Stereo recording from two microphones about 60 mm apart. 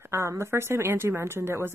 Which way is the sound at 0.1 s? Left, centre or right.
Right.